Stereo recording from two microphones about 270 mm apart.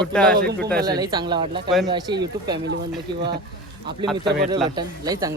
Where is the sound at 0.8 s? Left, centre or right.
Centre.